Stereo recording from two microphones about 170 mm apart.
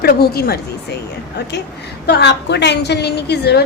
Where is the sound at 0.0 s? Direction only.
65° left (ahead or behind).